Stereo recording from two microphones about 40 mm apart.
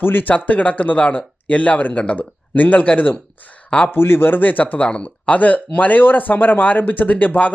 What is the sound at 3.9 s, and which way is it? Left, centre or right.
Speech, left.